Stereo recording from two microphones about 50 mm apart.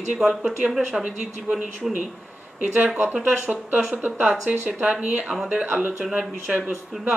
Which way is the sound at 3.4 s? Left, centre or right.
Right.